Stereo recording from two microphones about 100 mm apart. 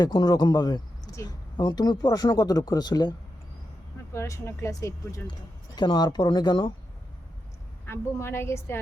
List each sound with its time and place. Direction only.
0.0 s speech: 45° left (ahead or behind)
4.1 s speech: 30° left (ahead or behind)
5.7 s speech: 50° left (ahead or behind)
7.9 s a woman's voice: 25° left (ahead or behind)